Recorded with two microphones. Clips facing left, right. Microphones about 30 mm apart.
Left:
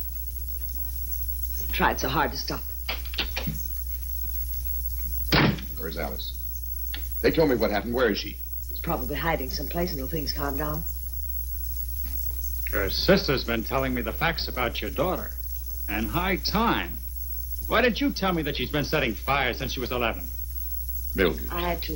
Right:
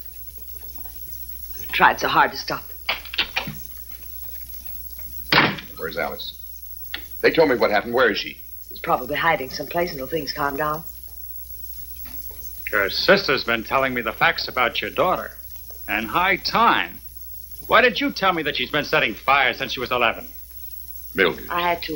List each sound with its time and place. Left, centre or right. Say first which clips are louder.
0.6 s a sound: right 3 dB; right
6.9 s speech: right 5 dB; right
12.0 s speech: right 3 dB; right